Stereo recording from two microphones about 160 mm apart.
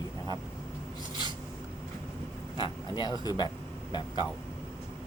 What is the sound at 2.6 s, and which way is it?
Speech, 25° left (ahead or behind).